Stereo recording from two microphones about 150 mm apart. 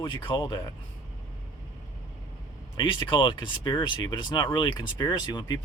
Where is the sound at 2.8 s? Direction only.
30° left (ahead or behind).